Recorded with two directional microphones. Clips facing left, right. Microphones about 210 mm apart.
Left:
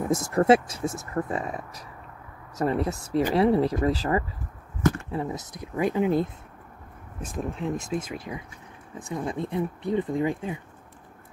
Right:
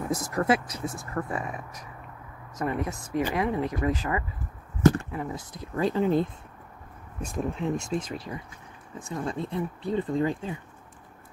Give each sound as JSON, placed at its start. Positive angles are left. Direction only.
{"t": 0.1, "sound": "speech", "side_deg": 25}
{"t": 5.1, "sound": "speech", "side_deg": 20}